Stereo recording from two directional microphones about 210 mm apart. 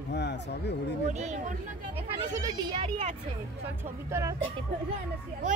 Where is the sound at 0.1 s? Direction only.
55° left (ahead or behind).